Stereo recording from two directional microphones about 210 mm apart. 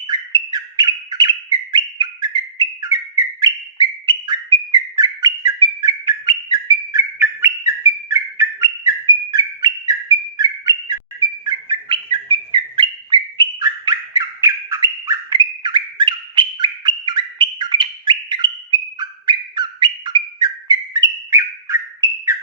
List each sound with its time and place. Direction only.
0.1 s bird: 20° right (ahead or behind)